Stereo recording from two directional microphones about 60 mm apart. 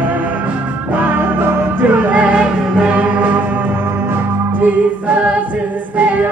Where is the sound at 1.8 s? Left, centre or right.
Right.